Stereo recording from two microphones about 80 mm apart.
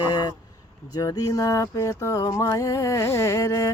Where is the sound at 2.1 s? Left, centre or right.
Left.